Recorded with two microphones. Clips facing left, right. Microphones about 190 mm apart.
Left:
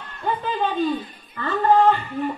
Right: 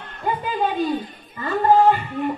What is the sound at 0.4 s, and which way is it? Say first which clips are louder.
A woman's voice: even; 10° right (ahead or behind).